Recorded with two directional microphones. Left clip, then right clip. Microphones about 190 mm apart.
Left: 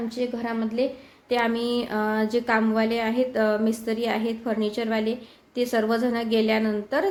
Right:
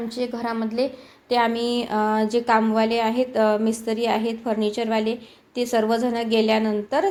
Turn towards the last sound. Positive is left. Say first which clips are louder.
# right 3 dB
turn(degrees=0)  # may be behind; listen again after turning